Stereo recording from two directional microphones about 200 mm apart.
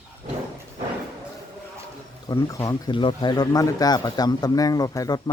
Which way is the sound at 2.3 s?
15° left (ahead or behind).